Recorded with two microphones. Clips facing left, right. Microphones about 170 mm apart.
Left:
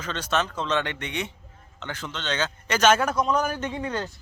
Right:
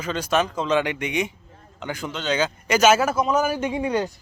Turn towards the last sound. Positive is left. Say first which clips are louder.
# right 6 dB
turn(degrees=-15)  # may be behind; listen again after turning